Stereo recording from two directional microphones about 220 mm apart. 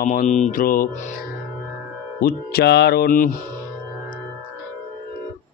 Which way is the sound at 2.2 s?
45° left (ahead or behind).